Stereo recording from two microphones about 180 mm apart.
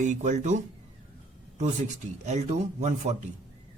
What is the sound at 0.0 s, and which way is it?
Speech, 40° right (ahead or behind).